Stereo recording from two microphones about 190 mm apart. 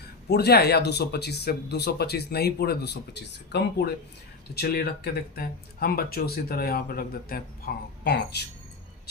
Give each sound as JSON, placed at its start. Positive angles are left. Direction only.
{"t": 0.3, "sound": "speech", "side_deg": 55}